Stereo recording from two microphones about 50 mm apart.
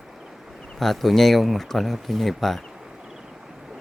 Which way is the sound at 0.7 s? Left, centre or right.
Centre.